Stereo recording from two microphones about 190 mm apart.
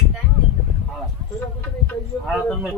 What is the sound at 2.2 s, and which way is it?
Speech, 5° right (ahead or behind).